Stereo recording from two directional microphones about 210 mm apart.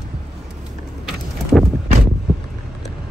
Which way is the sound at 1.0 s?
Centre (ahead or behind).